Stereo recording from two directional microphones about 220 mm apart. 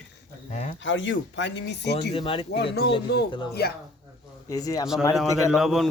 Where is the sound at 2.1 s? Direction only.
25° left (ahead or behind).